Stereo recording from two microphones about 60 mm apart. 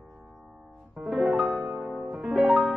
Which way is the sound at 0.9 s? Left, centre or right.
Centre.